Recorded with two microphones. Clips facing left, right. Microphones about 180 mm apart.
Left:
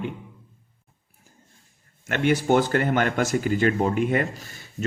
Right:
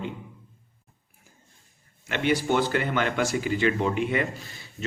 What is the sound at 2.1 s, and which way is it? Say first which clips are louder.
Speech: left 3 dB; 50° left (ahead or behind).